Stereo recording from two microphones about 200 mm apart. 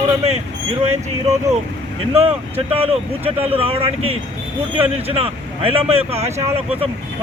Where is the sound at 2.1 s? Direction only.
30° right (ahead or behind).